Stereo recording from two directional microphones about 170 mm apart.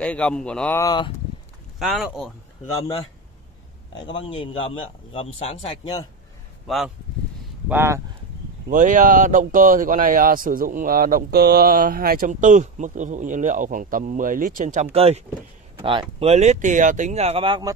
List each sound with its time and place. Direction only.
0.0 s speech: 5° left (ahead or behind)
0.8 s speech: 25° left (ahead or behind)
1.8 s speech: centre (ahead or behind)
4.0 s a man's voice: 30° left (ahead or behind)
7.6 s speech: 15° right (ahead or behind)
8.6 s speech: 50° right (ahead or behind); by 17.7 s 25° right (ahead or behind)